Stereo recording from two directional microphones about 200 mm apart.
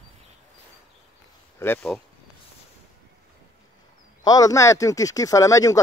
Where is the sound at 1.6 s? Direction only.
10° left (ahead or behind).